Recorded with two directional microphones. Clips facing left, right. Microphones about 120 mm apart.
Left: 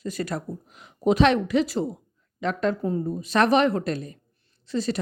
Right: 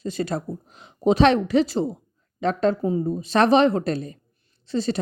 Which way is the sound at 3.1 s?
30° right (ahead or behind).